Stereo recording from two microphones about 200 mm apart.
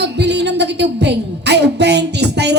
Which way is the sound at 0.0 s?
60° right (ahead or behind).